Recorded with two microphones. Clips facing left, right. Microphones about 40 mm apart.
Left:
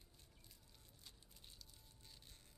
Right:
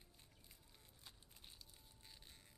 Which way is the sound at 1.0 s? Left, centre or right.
Centre.